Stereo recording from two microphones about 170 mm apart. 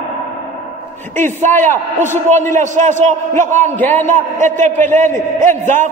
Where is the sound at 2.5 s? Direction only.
45° right (ahead or behind).